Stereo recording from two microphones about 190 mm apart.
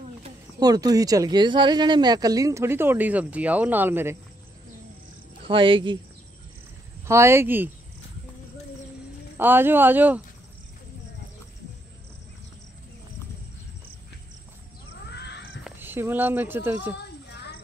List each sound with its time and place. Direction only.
0.6 s speech: 20° right (ahead or behind)
5.4 s speech: 30° right (ahead or behind)
7.1 s speech: 15° right (ahead or behind)
9.4 s speech: 10° right (ahead or behind)
15.6 s speech: 10° right (ahead or behind)
17.3 s a sound: 65° left (ahead or behind)